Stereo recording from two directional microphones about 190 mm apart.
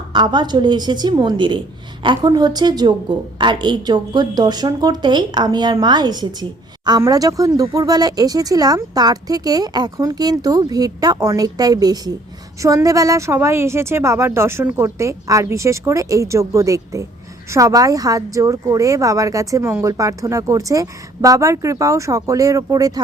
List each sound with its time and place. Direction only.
0.1 s speech: 25° right (ahead or behind)